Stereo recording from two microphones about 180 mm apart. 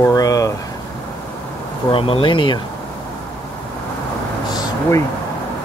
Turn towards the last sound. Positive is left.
turn(degrees=20)  # may be behind; listen again after turning